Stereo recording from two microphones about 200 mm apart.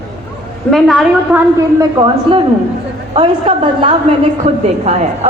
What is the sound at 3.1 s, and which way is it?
A woman's voice, 25° right (ahead or behind).